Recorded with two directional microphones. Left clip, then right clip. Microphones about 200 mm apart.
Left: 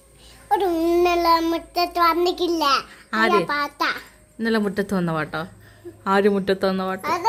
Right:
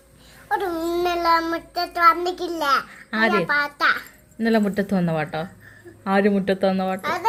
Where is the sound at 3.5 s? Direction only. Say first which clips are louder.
Right 3 dB; 30° left (ahead or behind).